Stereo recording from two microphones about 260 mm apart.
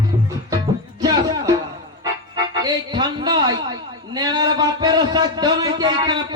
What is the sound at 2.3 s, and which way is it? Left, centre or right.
A man's voice, centre.